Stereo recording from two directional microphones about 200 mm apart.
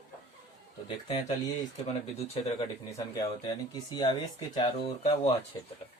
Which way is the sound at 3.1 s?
20° left (ahead or behind).